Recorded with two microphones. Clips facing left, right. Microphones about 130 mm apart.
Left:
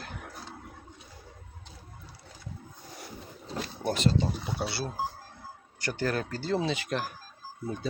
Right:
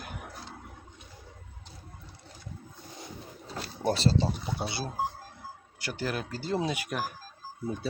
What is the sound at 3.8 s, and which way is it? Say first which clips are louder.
Speech: right 1 dB; 35° right (ahead or behind).